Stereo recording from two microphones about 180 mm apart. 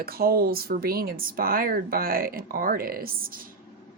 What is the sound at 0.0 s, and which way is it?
Speech, 55° right (ahead or behind).